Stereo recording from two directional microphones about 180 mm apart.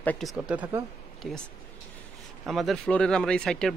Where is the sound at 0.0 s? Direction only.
5° left (ahead or behind).